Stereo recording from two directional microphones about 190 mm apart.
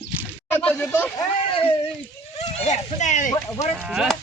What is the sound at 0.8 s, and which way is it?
Speech, 10° left (ahead or behind).